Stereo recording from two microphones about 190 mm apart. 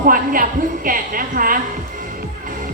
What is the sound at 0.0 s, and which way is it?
A woman's voice, 50° right (ahead or behind).